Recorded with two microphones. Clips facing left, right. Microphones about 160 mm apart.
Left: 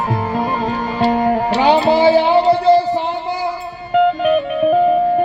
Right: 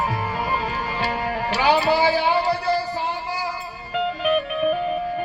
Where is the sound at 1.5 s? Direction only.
20° left (ahead or behind).